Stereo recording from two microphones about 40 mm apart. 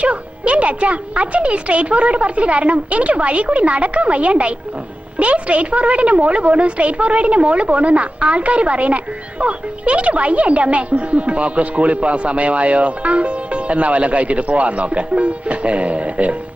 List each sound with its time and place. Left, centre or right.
0.0 s speech: right